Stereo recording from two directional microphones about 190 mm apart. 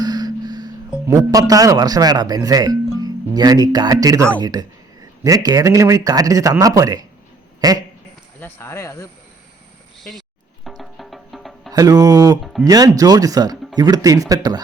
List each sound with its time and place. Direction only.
0.0 s speech: 20° right (ahead or behind)
8.4 s speech: 10° left (ahead or behind)
10.0 s music: centre (ahead or behind)
11.7 s speech: 20° right (ahead or behind)